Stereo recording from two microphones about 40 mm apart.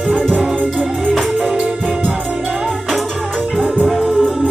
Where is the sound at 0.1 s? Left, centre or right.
Centre.